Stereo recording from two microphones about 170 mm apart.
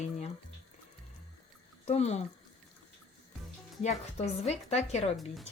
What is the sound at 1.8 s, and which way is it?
Speech, 40° left (ahead or behind).